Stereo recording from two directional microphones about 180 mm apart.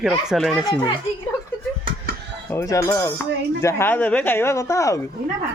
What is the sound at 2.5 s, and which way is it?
Speech, 20° left (ahead or behind).